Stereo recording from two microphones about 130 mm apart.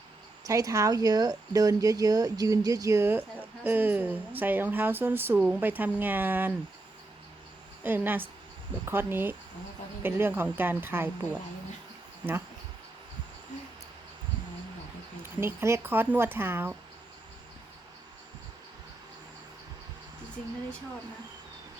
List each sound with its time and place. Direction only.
0.4 s speech: 25° right (ahead or behind)
7.9 s speech: 15° right (ahead or behind)
15.2 s speech: 20° right (ahead or behind)